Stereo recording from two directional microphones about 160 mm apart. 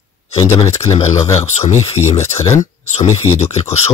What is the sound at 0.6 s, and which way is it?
Speech, 40° left (ahead or behind).